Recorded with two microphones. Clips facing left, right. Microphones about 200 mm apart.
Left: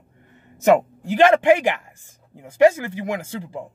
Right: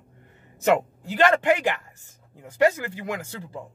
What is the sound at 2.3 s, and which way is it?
Speech, 15° left (ahead or behind).